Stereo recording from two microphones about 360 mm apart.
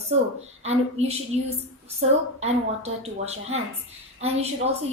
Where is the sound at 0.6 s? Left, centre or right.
Centre.